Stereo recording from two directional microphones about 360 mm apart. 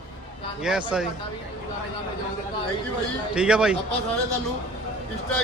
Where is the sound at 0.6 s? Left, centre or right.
Centre.